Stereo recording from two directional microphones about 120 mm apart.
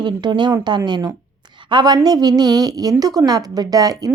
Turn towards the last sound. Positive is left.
turn(degrees=-30)  # may be behind; listen again after turning